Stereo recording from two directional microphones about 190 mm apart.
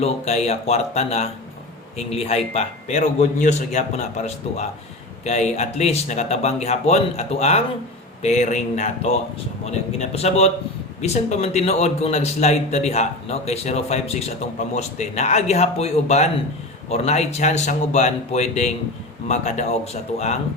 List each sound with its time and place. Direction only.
0.0 s a man's voice: 35° left (ahead or behind)